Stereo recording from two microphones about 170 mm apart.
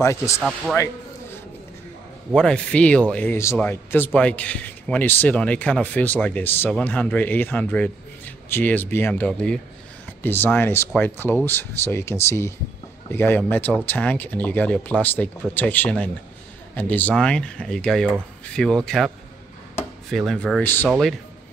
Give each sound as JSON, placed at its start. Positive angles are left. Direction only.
{"t": 0.0, "sound": "a man's voice", "side_deg": 15}
{"t": 0.4, "sound": "speech", "side_deg": 0}
{"t": 2.3, "sound": "a man's voice", "side_deg": 5}
{"t": 20.6, "sound": "a man's voice", "side_deg": 10}